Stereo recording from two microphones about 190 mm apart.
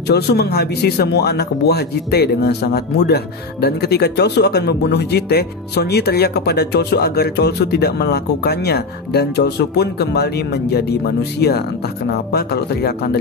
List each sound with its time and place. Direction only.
0.0 s speech: 60° left (ahead or behind)